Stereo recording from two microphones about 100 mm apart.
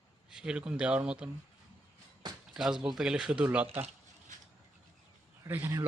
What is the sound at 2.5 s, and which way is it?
Speech, 5° right (ahead or behind).